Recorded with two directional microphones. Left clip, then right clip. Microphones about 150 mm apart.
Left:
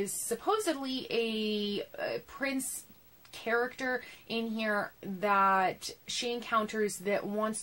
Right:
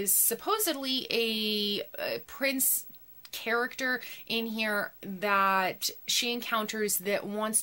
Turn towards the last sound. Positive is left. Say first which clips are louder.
# right 1 dB
turn(degrees=-15)  # may be behind; listen again after turning